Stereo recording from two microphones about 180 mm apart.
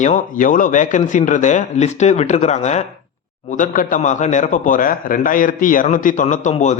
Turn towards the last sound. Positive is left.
turn(degrees=40)  # may be behind; listen again after turning